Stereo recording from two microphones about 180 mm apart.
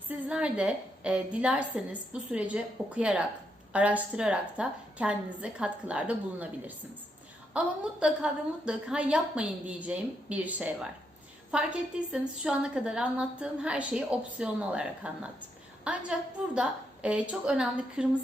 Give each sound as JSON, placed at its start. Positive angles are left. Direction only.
{"t": 0.1, "sound": "a woman's voice", "side_deg": -5}